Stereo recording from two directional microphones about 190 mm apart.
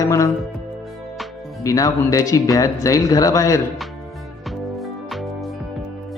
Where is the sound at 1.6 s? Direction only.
20° left (ahead or behind).